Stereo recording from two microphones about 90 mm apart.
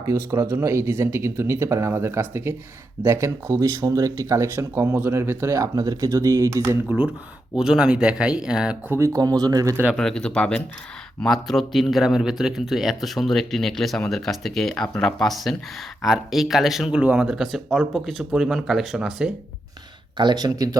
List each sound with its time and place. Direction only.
0.0 s speech: 35° right (ahead or behind)
7.5 s speech: 10° right (ahead or behind)
8.9 s speech: 35° right (ahead or behind)
9.9 s speech: 5° left (ahead or behind)
17.0 s speech: 15° right (ahead or behind)
20.1 s speech: 55° right (ahead or behind)